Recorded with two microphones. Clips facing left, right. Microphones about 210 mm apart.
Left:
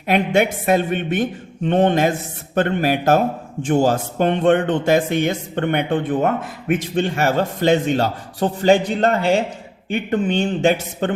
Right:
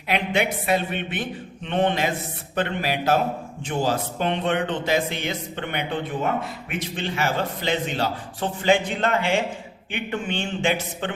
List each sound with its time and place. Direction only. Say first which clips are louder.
0.1 s speech: left 6 dB; 45° left (ahead or behind)